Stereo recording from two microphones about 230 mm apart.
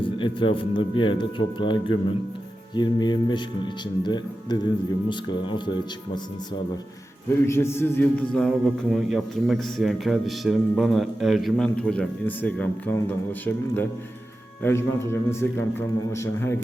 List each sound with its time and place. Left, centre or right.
0.0 s speech: left
7.4 s a man's voice: centre